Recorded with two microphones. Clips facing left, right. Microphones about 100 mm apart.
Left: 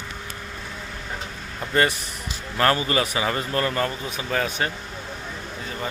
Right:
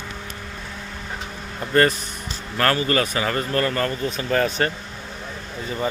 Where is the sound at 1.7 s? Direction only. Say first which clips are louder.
Right 4 dB; 10° left (ahead or behind).